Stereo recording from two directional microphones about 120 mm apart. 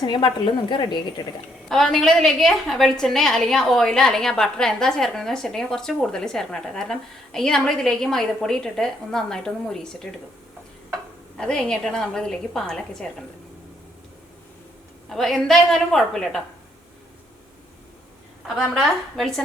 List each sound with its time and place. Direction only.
0.0 s speech: 40° left (ahead or behind)
1.7 s a woman's voice: 5° left (ahead or behind)
11.3 s a woman's voice: 5° left (ahead or behind)
15.1 s a woman's voice: centre (ahead or behind)
18.4 s a woman's voice: centre (ahead or behind)